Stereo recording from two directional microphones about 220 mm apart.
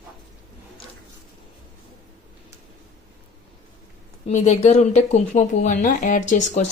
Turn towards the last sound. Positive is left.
turn(degrees=35)  # may be behind; listen again after turning